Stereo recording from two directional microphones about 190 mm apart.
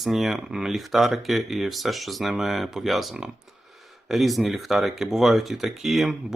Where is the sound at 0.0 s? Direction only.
Centre (ahead or behind).